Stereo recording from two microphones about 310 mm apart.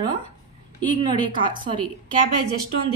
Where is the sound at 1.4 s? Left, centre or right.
Centre.